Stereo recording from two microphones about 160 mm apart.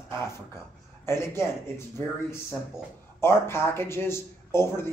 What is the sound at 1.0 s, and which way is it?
Speech, 15° left (ahead or behind).